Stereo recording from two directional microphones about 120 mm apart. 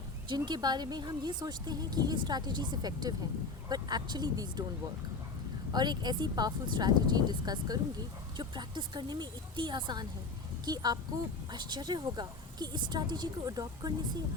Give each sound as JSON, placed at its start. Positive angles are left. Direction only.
{"t": 0.3, "sound": "speech", "side_deg": -40}
{"t": 5.7, "sound": "speech", "side_deg": -35}